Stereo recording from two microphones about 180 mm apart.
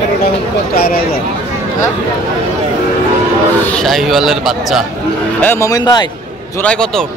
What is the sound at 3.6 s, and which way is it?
Speech, 5° left (ahead or behind).